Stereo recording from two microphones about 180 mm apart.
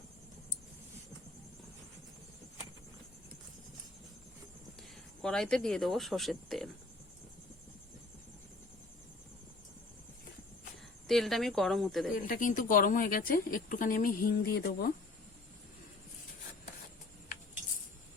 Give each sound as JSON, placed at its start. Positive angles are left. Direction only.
{"t": 4.8, "sound": "speech", "side_deg": 5}
{"t": 11.1, "sound": "speech", "side_deg": 0}
{"t": 12.1, "sound": "speech", "side_deg": 50}